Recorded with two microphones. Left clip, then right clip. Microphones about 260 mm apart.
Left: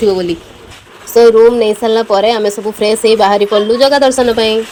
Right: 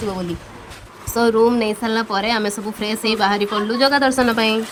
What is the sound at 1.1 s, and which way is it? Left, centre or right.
A woman's voice, right.